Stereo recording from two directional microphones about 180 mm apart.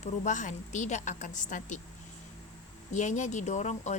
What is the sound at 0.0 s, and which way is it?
Speech, 45° left (ahead or behind).